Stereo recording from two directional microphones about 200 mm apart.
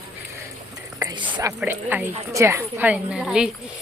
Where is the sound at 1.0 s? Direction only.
20° right (ahead or behind).